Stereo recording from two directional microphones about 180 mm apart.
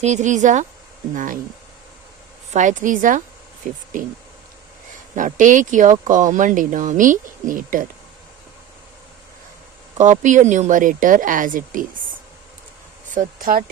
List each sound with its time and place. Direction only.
0.0 s speech: 40° right (ahead or behind)
2.5 s speech: 45° right (ahead or behind)
5.1 s speech: 45° right (ahead or behind)
10.0 s speech: 45° right (ahead or behind)
13.1 s speech: 50° right (ahead or behind)